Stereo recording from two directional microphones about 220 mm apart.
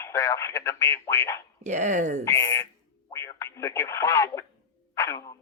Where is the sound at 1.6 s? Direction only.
35° right (ahead or behind).